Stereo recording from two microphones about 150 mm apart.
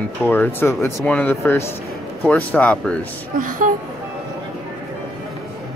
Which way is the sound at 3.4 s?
65° right (ahead or behind).